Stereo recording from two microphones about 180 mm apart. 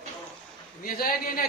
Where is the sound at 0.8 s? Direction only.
50° left (ahead or behind).